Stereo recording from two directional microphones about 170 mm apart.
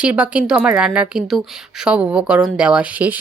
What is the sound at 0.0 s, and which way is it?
Speech, 5° right (ahead or behind).